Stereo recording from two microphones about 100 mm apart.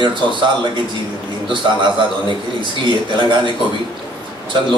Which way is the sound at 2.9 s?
55° right (ahead or behind).